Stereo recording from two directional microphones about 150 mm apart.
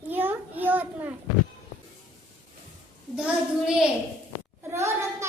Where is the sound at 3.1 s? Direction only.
5° right (ahead or behind).